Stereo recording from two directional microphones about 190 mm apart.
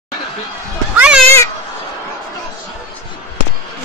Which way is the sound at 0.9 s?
5° right (ahead or behind).